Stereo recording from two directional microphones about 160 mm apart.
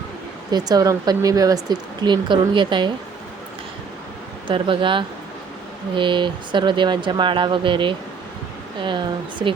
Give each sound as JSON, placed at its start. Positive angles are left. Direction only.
{"t": 0.5, "sound": "speech", "side_deg": -25}
{"t": 4.4, "sound": "speech", "side_deg": -30}